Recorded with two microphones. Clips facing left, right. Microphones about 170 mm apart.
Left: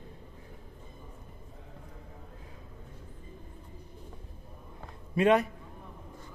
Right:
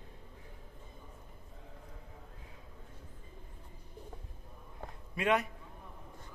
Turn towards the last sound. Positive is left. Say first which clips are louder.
# left 7 dB
turn(degrees=35)  # may be behind; listen again after turning